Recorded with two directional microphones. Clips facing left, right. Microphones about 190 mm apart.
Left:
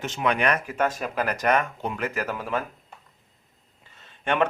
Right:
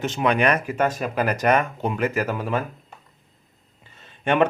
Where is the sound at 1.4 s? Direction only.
15° right (ahead or behind).